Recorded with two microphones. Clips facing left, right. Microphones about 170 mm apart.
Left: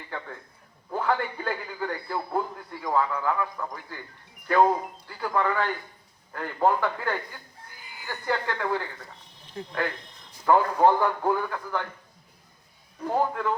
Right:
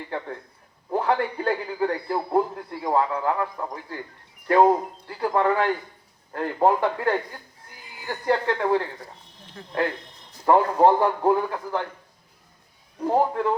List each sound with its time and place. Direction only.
0.9 s a man's voice: 30° right (ahead or behind)
10.4 s a man's voice: 25° right (ahead or behind)
13.1 s a man's voice: 25° right (ahead or behind)